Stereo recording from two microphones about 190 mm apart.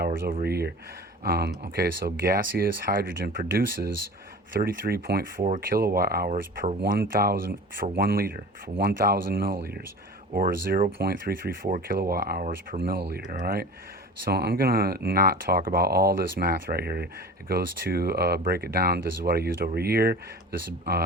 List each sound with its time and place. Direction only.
0.0 s speech: 45° right (ahead or behind)
4.6 s speech: 55° right (ahead or behind)